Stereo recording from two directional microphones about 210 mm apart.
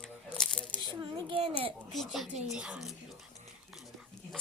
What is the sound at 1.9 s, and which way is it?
A woman's voice, centre (ahead or behind).